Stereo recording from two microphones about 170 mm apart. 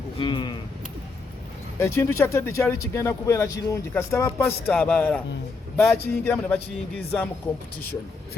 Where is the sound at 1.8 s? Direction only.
15° left (ahead or behind).